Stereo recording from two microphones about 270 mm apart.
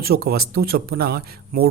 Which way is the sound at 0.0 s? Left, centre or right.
Right.